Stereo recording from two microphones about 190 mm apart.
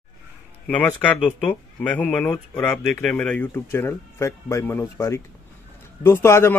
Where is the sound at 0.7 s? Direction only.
10° left (ahead or behind).